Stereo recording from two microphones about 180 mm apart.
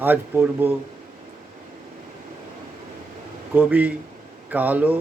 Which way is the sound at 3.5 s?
10° right (ahead or behind).